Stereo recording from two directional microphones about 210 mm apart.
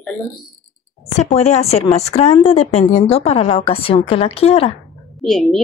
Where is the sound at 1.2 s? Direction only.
30° left (ahead or behind).